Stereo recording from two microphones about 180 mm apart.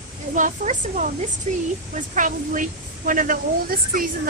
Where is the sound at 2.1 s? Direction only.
45° right (ahead or behind).